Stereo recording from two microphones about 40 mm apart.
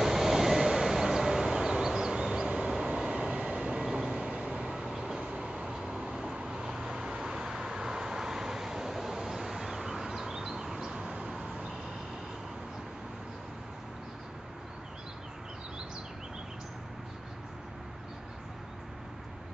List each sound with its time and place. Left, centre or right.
0.0 s train: centre
3.0 s vehicle: right
4.7 s vehicle: centre